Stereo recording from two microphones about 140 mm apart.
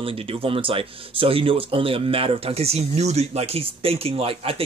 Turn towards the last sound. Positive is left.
turn(degrees=-40)  # may be behind; listen again after turning